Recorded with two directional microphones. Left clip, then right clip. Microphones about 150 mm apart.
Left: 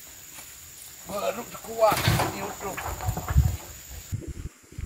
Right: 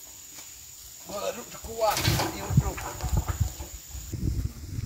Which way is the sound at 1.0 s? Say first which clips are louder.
Left 3 dB; 20° right (ahead or behind).